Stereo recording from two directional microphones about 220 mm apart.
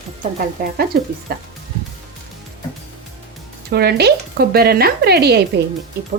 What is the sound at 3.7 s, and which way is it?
Speech, 45° right (ahead or behind).